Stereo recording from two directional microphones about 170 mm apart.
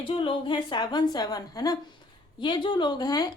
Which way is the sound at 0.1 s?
30° left (ahead or behind).